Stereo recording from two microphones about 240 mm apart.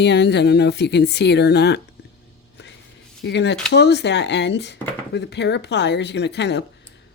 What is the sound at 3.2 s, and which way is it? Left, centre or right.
A woman's voice, left.